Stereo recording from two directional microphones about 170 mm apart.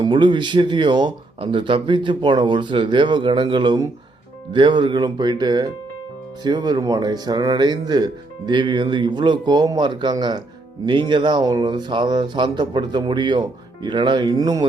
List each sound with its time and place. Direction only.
0.0 s speech: 25° right (ahead or behind)